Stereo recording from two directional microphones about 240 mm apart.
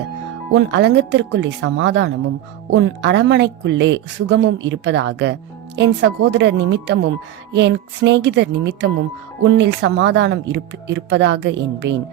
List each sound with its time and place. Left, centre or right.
0.5 s a woman's voice: right